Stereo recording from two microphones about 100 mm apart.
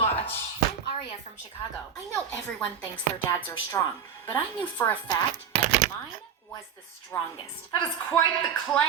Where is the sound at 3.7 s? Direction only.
35° left (ahead or behind).